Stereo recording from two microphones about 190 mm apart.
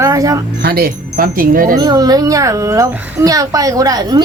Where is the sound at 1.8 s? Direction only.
20° right (ahead or behind).